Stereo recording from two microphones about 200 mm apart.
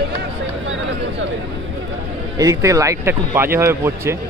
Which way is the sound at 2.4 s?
15° right (ahead or behind).